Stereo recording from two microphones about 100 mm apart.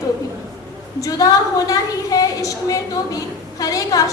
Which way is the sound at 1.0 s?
35° left (ahead or behind).